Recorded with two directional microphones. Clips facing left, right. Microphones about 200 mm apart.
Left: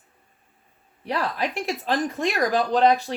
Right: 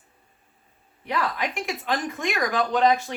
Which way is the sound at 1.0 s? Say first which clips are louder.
Left 1 dB; 35° left (ahead or behind).